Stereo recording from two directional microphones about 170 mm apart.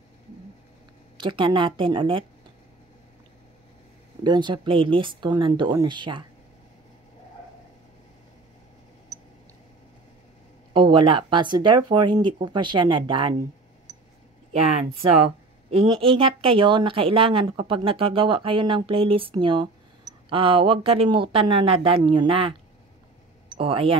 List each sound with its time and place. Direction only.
1.1 s speech: 30° right (ahead or behind)
4.2 s speech: 25° right (ahead or behind)
10.7 s speech: 30° right (ahead or behind)
15.9 s speech: 30° right (ahead or behind)
23.6 s speech: 30° right (ahead or behind)